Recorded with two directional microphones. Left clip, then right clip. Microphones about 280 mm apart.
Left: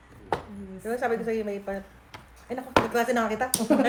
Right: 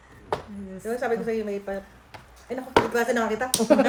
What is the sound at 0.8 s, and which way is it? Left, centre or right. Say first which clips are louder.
A woman's voice: right 1 dB; centre.